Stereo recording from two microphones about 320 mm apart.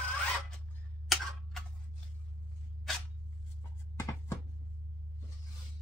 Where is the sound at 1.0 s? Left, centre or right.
Centre.